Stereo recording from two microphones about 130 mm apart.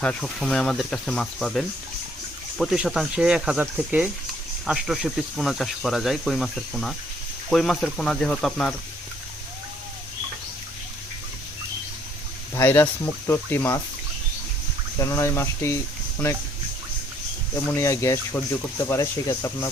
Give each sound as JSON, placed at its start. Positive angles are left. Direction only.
{"t": 0.0, "sound": "speech", "side_deg": 5}
{"t": 12.5, "sound": "speech", "side_deg": 20}
{"t": 14.9, "sound": "speech", "side_deg": 25}
{"t": 17.5, "sound": "speech", "side_deg": 20}